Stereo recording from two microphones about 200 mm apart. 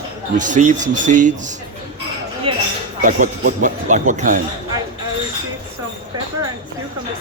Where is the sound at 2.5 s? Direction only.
25° right (ahead or behind).